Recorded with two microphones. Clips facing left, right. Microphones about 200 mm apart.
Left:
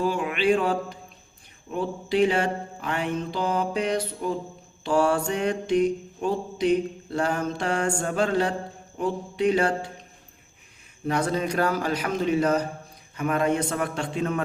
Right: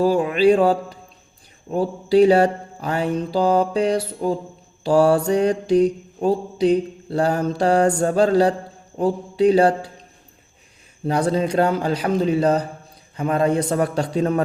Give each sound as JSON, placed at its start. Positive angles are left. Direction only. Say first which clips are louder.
{"t": 0.0, "sound": "mantra", "louder": "right 8 dB", "side_deg": -35}
{"t": 11.0, "sound": "mantra", "louder": "right 5 dB", "side_deg": -30}